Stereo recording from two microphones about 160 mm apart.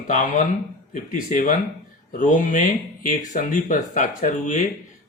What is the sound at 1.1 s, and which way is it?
Speech, 55° left (ahead or behind).